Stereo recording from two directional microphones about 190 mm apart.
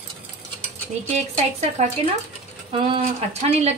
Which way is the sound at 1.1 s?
35° right (ahead or behind).